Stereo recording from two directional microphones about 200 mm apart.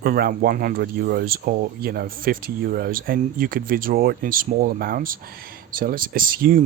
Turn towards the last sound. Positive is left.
turn(degrees=-45)  # may be behind; listen again after turning